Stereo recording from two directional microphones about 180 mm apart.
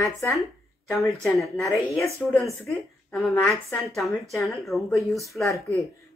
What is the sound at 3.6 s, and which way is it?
Speech, 15° left (ahead or behind).